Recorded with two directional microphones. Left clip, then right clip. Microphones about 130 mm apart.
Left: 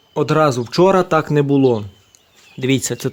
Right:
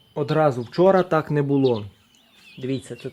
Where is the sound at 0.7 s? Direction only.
25° left (ahead or behind).